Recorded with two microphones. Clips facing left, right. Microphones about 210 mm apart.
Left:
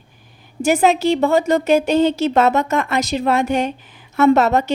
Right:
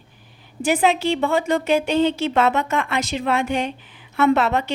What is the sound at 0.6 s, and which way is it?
A woman's voice, 45° left (ahead or behind).